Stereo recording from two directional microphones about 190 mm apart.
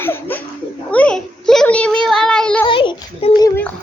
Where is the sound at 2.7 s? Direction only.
25° left (ahead or behind).